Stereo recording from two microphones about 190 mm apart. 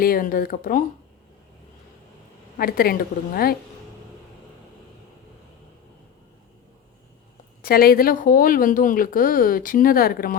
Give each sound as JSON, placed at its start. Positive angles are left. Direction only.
{"t": 0.0, "sound": "speech", "side_deg": 50}
{"t": 2.6, "sound": "speech", "side_deg": 50}
{"t": 7.6, "sound": "speech", "side_deg": 50}